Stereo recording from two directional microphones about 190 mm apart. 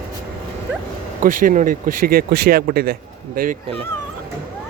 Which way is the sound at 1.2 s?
45° right (ahead or behind).